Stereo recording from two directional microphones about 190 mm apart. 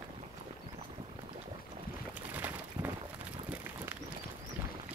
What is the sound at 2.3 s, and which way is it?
Bird, 10° right (ahead or behind).